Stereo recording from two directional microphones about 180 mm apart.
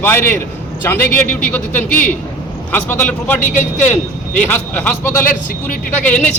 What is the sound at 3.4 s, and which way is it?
Speech, 50° left (ahead or behind).